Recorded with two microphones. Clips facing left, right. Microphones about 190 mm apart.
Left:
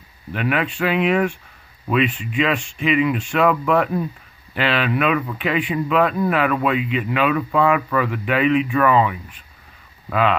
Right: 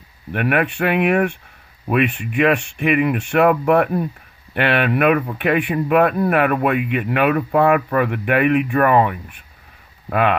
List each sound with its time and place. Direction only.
0.3 s speech: 60° right (ahead or behind)